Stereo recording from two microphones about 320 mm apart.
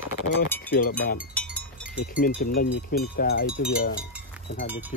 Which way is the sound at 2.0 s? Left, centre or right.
Left.